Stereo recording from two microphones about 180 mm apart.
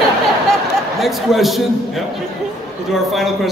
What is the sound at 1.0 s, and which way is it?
Speech, centre (ahead or behind).